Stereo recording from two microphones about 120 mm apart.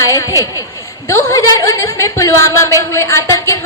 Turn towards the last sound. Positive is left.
turn(degrees=25)  # may be behind; listen again after turning